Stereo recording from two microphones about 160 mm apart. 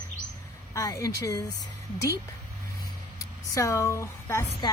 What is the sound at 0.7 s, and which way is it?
Speech, 20° left (ahead or behind).